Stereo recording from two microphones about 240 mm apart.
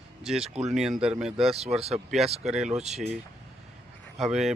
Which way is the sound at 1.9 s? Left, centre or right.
Centre.